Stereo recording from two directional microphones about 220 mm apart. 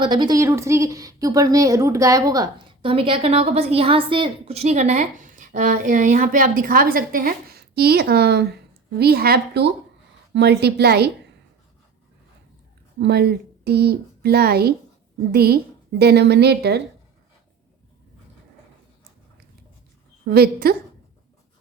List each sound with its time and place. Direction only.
0.0 s a woman's voice: 20° right (ahead or behind); by 11.1 s 45° right (ahead or behind)
13.0 s a woman's voice: 50° right (ahead or behind)
20.2 s a woman's voice: 45° right (ahead or behind)